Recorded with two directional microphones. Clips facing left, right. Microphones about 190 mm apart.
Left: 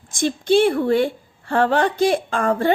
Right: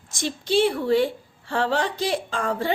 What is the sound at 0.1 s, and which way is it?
A woman's voice, 50° left (ahead or behind).